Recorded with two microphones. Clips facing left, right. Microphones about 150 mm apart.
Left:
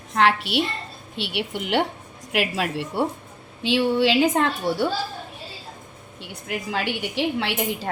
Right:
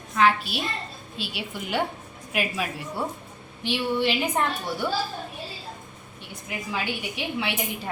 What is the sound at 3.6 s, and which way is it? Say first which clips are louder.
Speech: left 5 dB; 90° left.